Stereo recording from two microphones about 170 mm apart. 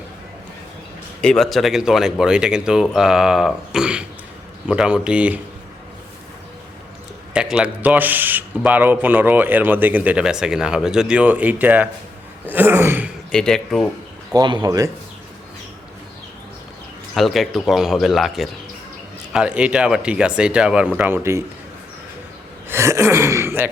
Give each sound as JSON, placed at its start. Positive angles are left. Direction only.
{"t": 1.2, "sound": "a man's voice", "side_deg": 0}
{"t": 7.3, "sound": "a man's voice", "side_deg": -5}
{"t": 13.3, "sound": "speech", "side_deg": 5}
{"t": 14.3, "sound": "speech", "side_deg": -25}
{"t": 17.2, "sound": "a man's voice", "side_deg": 0}
{"t": 22.7, "sound": "a man's voice", "side_deg": -15}